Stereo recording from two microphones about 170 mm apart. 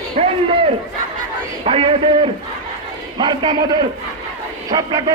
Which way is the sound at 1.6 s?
35° right (ahead or behind).